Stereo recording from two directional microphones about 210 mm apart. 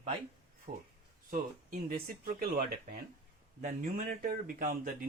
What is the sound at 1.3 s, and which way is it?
Speech, 45° right (ahead or behind).